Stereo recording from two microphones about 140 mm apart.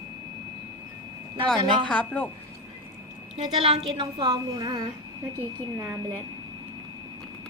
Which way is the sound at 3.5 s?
45° right (ahead or behind).